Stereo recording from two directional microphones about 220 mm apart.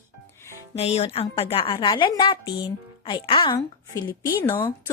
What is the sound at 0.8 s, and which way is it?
A woman's voice, 30° left (ahead or behind).